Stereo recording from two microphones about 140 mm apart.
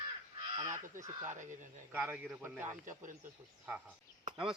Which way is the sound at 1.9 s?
10° right (ahead or behind).